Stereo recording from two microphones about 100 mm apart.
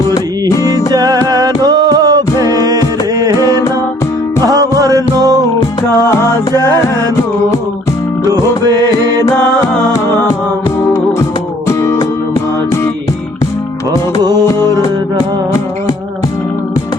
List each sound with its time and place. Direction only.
0.7 s music: 40° right (ahead or behind)
8.3 s music: 40° right (ahead or behind)
11.7 s music: 30° left (ahead or behind)
14.3 s music: 40° right (ahead or behind)